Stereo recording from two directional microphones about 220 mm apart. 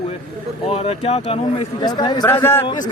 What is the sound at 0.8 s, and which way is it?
A man's voice, 25° left (ahead or behind).